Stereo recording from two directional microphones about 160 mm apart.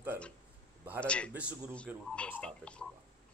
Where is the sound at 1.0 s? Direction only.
5° left (ahead or behind).